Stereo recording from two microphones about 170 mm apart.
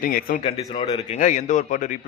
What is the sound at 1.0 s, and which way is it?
Speech, 45° left (ahead or behind).